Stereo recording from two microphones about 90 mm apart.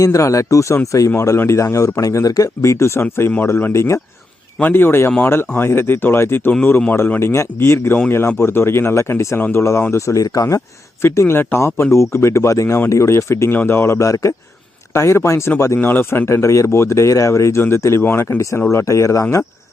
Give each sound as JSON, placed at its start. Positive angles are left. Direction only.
{"t": 0.0, "sound": "speech", "side_deg": 35}